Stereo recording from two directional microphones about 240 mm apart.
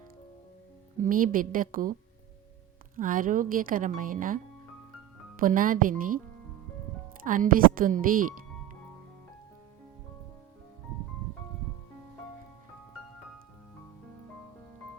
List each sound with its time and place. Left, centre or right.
1.0 s a woman's voice: right
5.4 s a woman's voice: right
7.3 s a woman's voice: right